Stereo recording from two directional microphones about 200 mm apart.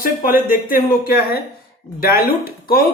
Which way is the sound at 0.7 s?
45° left (ahead or behind).